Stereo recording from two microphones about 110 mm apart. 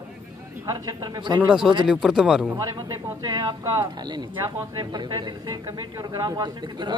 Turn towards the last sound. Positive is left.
turn(degrees=-40)  # may be behind; listen again after turning